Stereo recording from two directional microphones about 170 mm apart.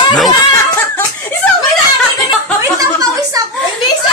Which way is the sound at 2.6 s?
20° right (ahead or behind).